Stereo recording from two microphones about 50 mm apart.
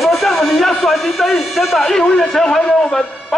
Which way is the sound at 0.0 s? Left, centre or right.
Centre.